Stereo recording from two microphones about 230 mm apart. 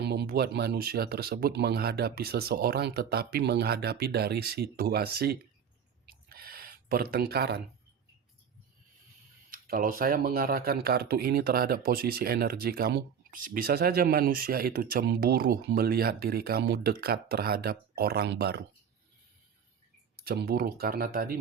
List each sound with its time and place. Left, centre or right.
0.0 s speech: right
6.1 s a sound: right
9.5 s speech: right
20.2 s speech: right